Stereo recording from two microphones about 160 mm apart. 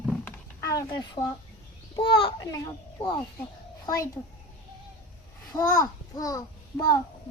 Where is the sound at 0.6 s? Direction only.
20° left (ahead or behind).